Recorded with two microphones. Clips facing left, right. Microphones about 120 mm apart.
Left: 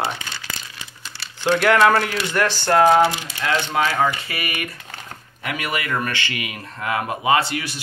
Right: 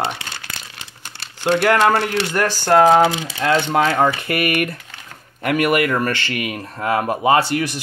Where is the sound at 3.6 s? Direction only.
55° right (ahead or behind).